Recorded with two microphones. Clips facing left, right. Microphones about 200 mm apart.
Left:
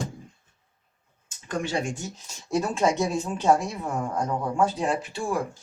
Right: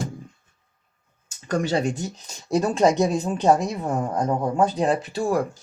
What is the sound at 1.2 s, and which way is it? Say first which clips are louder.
Speech: right 6 dB; 40° right (ahead or behind).